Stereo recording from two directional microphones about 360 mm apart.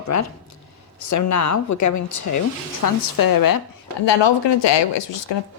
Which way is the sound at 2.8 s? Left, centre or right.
Left.